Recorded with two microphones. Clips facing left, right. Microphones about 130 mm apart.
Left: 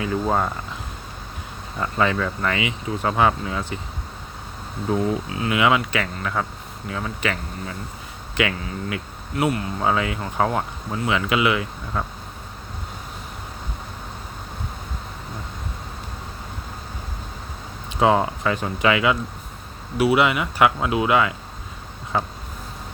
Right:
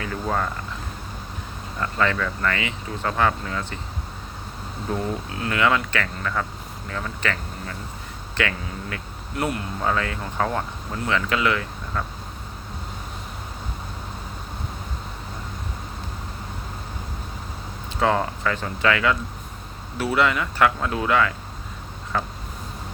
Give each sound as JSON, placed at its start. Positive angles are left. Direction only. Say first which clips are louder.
{"t": 0.0, "sound": "speech", "louder": "left 4 dB", "side_deg": 20}
{"t": 1.8, "sound": "speech", "louder": "left 2 dB", "side_deg": 15}
{"t": 4.9, "sound": "speech", "louder": "left 5 dB", "side_deg": 5}
{"t": 9.3, "sound": "speech", "louder": "left 4 dB", "side_deg": 0}
{"t": 9.8, "sound": "speech", "louder": "left 2 dB", "side_deg": 10}
{"t": 18.0, "sound": "speech", "louder": "left 3 dB", "side_deg": 15}